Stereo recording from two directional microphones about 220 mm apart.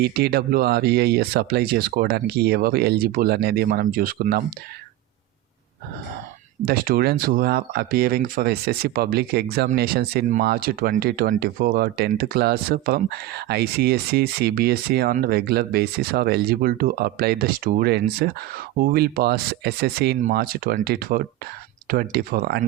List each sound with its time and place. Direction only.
0.0 s speech: 45° right (ahead or behind)
6.7 s speech: 40° right (ahead or behind)